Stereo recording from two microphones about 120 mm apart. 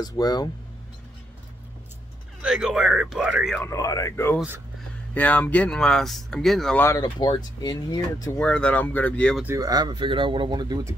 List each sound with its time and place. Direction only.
0.0 s speech: 35° left (ahead or behind)
2.4 s speech: 5° right (ahead or behind)
3.6 s speech: 30° left (ahead or behind)
5.1 s speech: 15° left (ahead or behind)
7.0 s speech: 35° left (ahead or behind)
8.4 s speech: 10° left (ahead or behind)
9.6 s speech: 35° right (ahead or behind)